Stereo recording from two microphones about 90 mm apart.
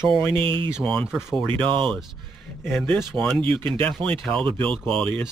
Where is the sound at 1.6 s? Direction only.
65° right (ahead or behind).